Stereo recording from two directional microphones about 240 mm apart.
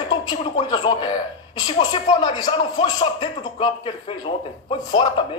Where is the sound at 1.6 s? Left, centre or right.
Centre.